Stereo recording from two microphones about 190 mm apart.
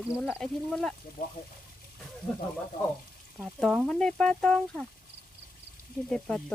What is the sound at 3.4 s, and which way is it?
Speech, centre (ahead or behind).